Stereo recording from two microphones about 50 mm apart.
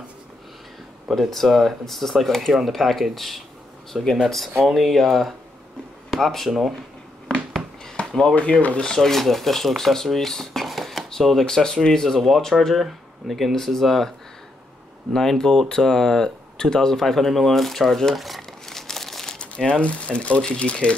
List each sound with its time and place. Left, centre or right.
1.1 s speech: centre
7.8 s a sound: left
8.4 s speech: left
8.9 s speech: centre
11.4 s speech: centre
15.1 s speech: centre
19.3 s speech: centre